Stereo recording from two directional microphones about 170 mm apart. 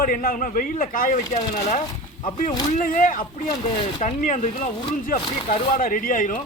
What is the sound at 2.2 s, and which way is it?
Speech, 25° left (ahead or behind).